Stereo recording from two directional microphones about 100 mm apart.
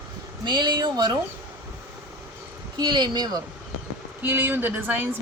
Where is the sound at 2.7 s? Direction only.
50° right (ahead or behind).